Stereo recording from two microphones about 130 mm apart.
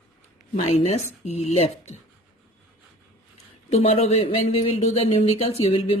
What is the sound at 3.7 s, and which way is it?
Speech, 50° left (ahead or behind).